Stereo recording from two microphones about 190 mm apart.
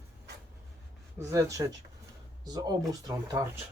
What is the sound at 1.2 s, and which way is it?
Speech, 15° right (ahead or behind).